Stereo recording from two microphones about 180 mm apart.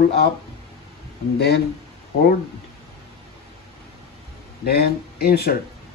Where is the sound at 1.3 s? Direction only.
70° left (ahead or behind).